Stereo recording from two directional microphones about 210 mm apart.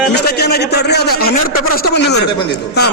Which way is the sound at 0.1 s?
50° left (ahead or behind).